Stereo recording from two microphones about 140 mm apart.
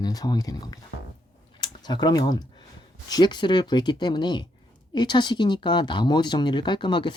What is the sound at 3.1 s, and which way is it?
Speech, 30° left (ahead or behind).